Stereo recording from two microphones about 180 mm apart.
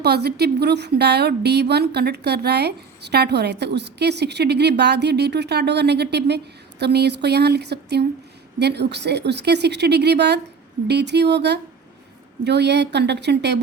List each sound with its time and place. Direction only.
0.0 s a woman's voice: 65° right (ahead or behind)